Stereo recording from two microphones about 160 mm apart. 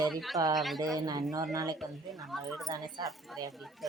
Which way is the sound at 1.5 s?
20° right (ahead or behind).